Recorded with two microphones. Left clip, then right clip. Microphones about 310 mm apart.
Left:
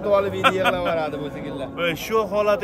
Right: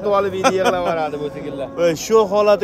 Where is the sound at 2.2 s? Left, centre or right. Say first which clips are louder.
Right 5 dB; centre.